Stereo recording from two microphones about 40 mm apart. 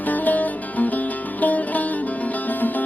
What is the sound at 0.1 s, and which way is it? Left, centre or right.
Music, left.